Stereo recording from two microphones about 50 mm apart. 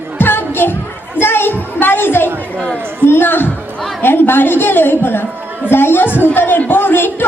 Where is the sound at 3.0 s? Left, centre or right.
Left.